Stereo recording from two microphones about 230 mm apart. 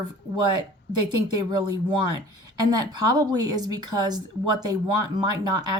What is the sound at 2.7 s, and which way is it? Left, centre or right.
Speech, centre.